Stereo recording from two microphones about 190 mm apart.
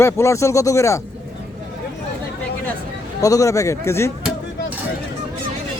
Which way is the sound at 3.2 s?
15° left (ahead or behind).